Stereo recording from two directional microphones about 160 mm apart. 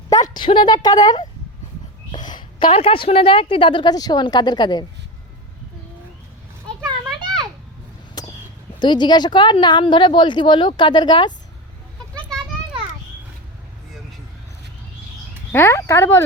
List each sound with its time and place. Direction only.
0.1 s a woman's voice: 25° left (ahead or behind)
8.2 s a sound: 25° left (ahead or behind)
8.8 s a woman's voice: 30° left (ahead or behind)
15.5 s speech: 15° left (ahead or behind)